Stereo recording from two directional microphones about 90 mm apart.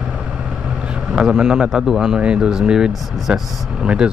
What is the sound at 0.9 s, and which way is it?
Speech, 10° right (ahead or behind).